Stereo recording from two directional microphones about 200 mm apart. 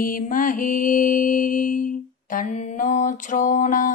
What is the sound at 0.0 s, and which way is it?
Mantra, 45° left (ahead or behind).